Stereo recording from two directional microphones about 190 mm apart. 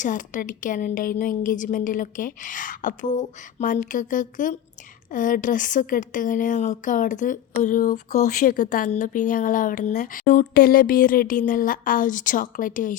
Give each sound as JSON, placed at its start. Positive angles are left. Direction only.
{"t": 0.0, "sound": "a woman's voice", "side_deg": 45}